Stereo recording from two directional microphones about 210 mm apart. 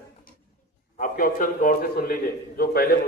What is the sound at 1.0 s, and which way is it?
A man's voice, 40° left (ahead or behind).